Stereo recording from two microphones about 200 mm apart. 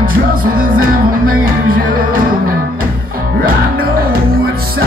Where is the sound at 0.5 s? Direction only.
45° right (ahead or behind).